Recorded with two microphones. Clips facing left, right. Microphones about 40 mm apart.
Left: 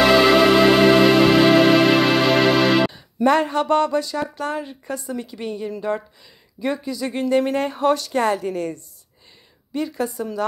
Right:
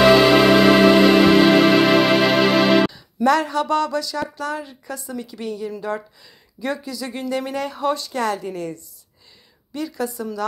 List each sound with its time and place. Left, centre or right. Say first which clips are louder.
0.0 s music: right 1 dB; centre
3.3 s speech: left 1 dB; left